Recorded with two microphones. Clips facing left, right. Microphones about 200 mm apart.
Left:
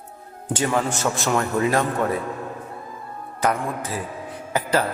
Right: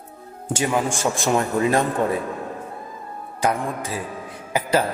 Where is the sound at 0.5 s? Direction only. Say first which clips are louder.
Even; 15° right (ahead or behind).